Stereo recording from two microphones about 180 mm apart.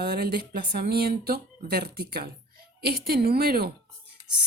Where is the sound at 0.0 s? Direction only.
60° right (ahead or behind).